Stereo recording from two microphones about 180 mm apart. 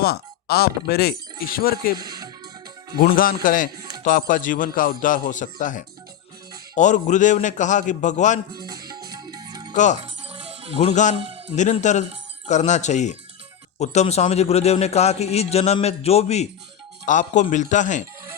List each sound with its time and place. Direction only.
0.0 s speech: 60° left (ahead or behind)
2.0 s speech: 20° right (ahead or behind)
3.0 s a man's voice: 55° left (ahead or behind)
8.6 s music: 20° right (ahead or behind)
9.7 s a man's voice: 45° left (ahead or behind)
10.2 s music: 35° right (ahead or behind)
10.8 s a man's voice: 40° left (ahead or behind)